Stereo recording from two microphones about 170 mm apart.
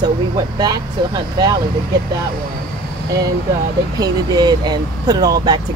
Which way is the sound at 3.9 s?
25° right (ahead or behind).